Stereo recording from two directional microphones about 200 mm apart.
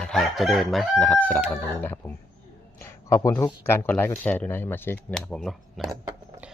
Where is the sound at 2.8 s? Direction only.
15° left (ahead or behind); by 5.9 s centre (ahead or behind).